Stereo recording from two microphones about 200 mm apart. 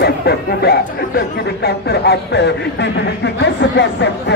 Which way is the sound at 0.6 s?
50° left (ahead or behind).